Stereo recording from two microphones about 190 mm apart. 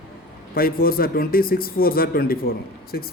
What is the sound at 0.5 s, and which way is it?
A man's voice, 50° left (ahead or behind).